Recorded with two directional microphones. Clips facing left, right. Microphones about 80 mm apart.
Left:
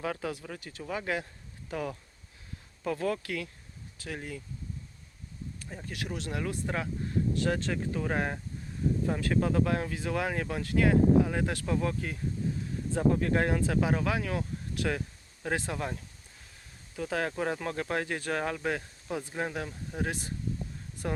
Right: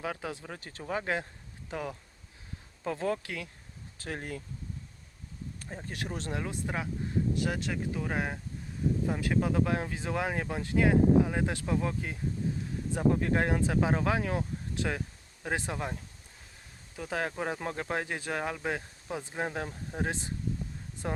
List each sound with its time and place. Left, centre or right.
0.0 s speech: centre
1.7 s speech: centre
3.9 s speech: right
5.6 s speech: right
6.4 s speech: centre